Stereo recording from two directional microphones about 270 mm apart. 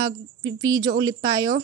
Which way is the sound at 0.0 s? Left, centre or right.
Centre.